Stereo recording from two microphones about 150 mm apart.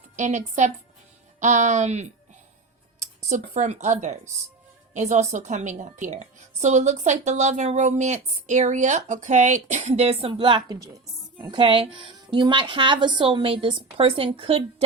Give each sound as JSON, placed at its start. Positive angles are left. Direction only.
{"t": 0.2, "sound": "a woman's voice", "side_deg": -55}
{"t": 3.2, "sound": "a woman's voice", "side_deg": -55}